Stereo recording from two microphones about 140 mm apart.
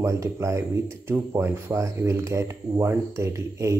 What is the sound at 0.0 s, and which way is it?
Speech, 20° right (ahead or behind).